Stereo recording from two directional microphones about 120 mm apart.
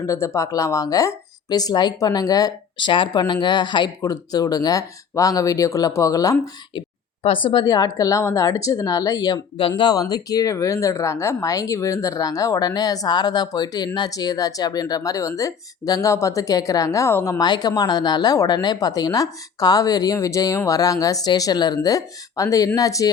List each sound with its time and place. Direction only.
0.0 s speech: 25° left (ahead or behind)
6.7 s speech: 45° left (ahead or behind); by 17.4 s 20° left (ahead or behind)
17.4 s speech: 35° left (ahead or behind)